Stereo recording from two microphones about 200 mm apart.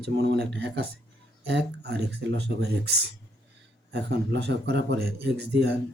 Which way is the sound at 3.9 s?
60° right (ahead or behind).